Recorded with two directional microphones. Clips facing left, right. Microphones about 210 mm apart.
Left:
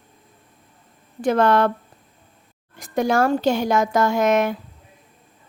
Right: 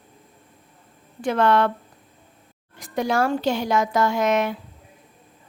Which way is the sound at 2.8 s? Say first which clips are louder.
Left 3 dB; 45° left (ahead or behind).